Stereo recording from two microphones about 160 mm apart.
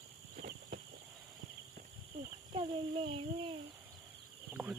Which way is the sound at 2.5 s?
35° right (ahead or behind).